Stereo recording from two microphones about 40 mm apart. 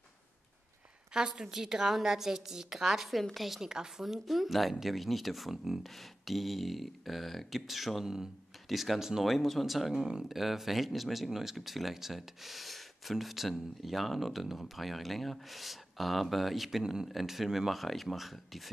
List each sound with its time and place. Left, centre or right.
1.1 s a woman's voice: centre
3.6 s a woman's voice: centre
4.0 s speech: centre
9.9 s a woman's voice: centre
10.2 s speech: centre
16.8 s a woman's voice: centre
17.1 s speech: centre